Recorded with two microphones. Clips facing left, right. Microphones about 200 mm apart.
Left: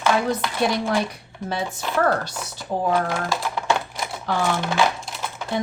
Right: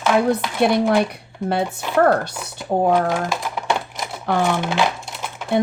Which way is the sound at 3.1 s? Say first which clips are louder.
Right 2 dB; 15° right (ahead or behind).